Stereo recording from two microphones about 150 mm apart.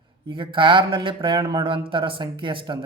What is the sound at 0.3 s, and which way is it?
Speech, 35° right (ahead or behind).